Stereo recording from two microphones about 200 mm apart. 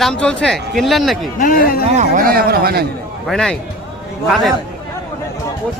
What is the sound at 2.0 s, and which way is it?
Speech, 45° right (ahead or behind).